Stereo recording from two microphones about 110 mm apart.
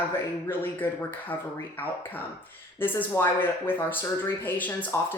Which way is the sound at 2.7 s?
20° left (ahead or behind).